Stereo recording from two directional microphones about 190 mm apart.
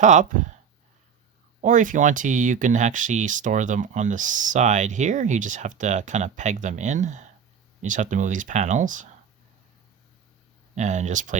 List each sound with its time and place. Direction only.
0.0 s speech: 40° right (ahead or behind)
1.6 s speech: 40° right (ahead or behind)
10.8 s speech: 40° right (ahead or behind)